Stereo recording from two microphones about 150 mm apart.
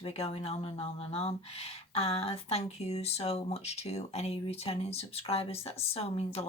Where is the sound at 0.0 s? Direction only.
40° left (ahead or behind).